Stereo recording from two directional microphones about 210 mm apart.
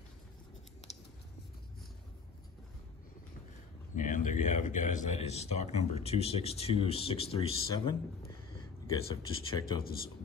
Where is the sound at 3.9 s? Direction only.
35° left (ahead or behind); by 8.0 s 20° left (ahead or behind).